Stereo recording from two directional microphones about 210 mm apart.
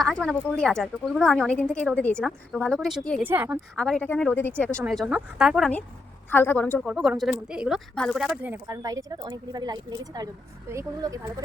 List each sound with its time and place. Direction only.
0.0 s speech: centre (ahead or behind)
3.2 s speech: 10° right (ahead or behind)
3.8 s speech: 5° left (ahead or behind); by 11.4 s 15° right (ahead or behind)